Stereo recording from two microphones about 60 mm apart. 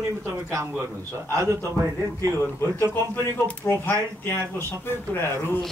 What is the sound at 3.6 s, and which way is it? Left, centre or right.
Speech, left.